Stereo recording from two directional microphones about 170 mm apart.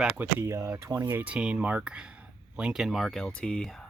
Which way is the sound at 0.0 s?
10° right (ahead or behind).